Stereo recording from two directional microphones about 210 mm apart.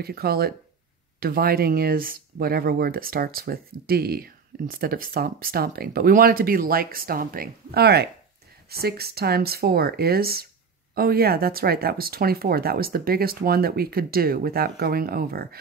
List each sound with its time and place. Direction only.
0.0 s speech: 45° right (ahead or behind)